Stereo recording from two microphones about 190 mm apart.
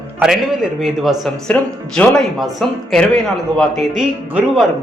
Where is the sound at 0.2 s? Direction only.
Centre (ahead or behind).